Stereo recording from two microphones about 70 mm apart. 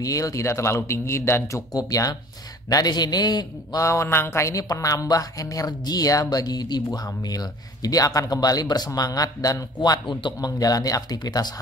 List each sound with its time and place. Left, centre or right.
0.0 s speech: left
1.7 s speech: left
2.7 s a man's voice: left
3.8 s speech: left